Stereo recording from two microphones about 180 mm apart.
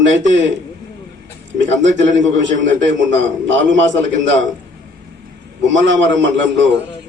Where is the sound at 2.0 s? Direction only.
90° right.